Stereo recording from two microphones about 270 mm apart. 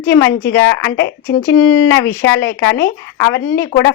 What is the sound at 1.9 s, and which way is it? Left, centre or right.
A woman's voice, centre.